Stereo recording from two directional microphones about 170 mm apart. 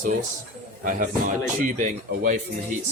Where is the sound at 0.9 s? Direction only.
50° right (ahead or behind).